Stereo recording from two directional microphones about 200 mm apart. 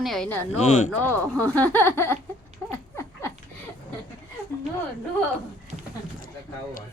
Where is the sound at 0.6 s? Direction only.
35° left (ahead or behind).